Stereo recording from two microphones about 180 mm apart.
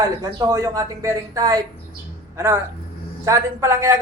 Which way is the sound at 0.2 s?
20° right (ahead or behind).